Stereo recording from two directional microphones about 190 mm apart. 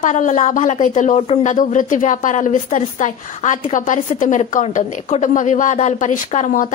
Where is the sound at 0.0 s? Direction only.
40° left (ahead or behind).